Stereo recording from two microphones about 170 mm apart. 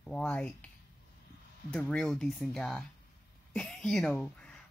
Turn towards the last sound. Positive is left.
turn(degrees=5)  # may be behind; listen again after turning